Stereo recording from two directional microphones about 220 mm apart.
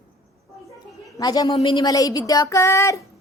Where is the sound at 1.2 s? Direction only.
15° left (ahead or behind).